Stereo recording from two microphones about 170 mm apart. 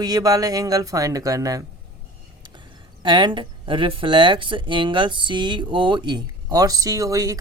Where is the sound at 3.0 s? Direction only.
25° right (ahead or behind).